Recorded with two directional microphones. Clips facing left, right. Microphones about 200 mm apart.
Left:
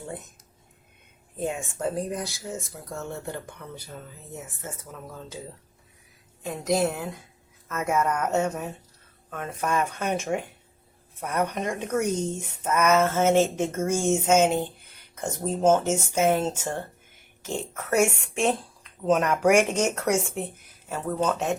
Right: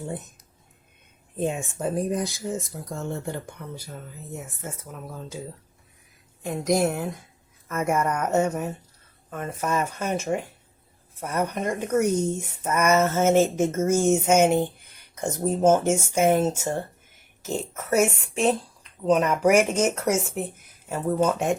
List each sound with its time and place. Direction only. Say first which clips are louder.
1.4 s speech: right 2 dB; 20° right (ahead or behind)
6.4 s speech: right 2 dB; 15° right (ahead or behind)